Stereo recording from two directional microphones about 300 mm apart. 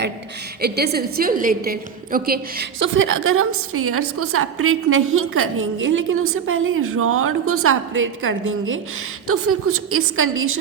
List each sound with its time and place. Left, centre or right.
0.6 s a woman's voice: right